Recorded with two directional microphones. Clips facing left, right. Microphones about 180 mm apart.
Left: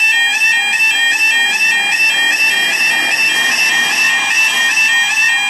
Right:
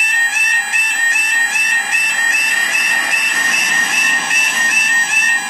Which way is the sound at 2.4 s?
75° left (ahead or behind).